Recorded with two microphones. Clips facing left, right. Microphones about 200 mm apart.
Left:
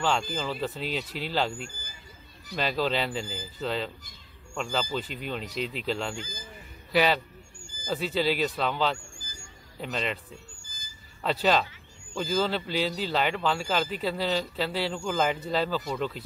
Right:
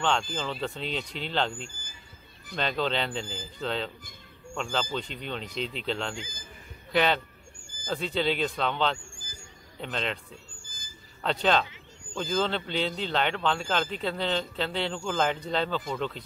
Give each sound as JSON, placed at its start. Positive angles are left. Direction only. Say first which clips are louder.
{"t": 0.0, "sound": "speech", "louder": "left 1 dB", "side_deg": 0}
{"t": 1.7, "sound": "a sound", "louder": "left 3 dB", "side_deg": -50}
{"t": 2.5, "sound": "a man's voice", "louder": "left 1 dB", "side_deg": 5}
{"t": 9.1, "sound": "vehicle", "louder": "even", "side_deg": -50}
{"t": 9.8, "sound": "speech", "louder": "left 1 dB", "side_deg": 5}
{"t": 10.6, "sound": "a sound", "louder": "right 1 dB", "side_deg": -55}
{"t": 11.2, "sound": "speech", "louder": "left 1 dB", "side_deg": 5}